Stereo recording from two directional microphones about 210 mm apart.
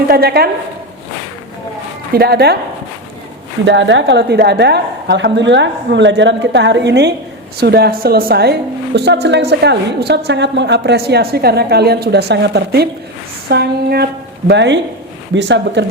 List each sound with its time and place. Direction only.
0.1 s a woman's voice: 50° right (ahead or behind)
2.1 s a woman's voice: 50° right (ahead or behind)
3.7 s a woman's voice: 60° right (ahead or behind)